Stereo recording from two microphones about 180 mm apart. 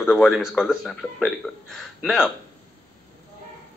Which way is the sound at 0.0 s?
Centre (ahead or behind).